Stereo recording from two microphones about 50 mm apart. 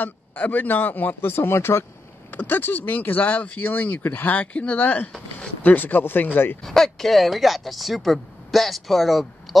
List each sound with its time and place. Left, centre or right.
0.0 s speech: left
2.3 s speech: left
4.4 s speech: left
6.6 s speech: centre